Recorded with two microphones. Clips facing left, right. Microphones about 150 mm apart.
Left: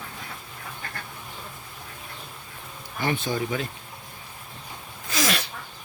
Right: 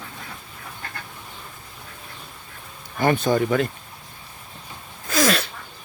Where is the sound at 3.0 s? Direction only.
45° right (ahead or behind).